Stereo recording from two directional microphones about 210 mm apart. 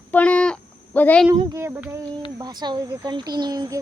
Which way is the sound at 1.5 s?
10° right (ahead or behind).